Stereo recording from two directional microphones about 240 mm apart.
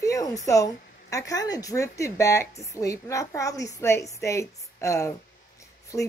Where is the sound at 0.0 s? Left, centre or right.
Centre.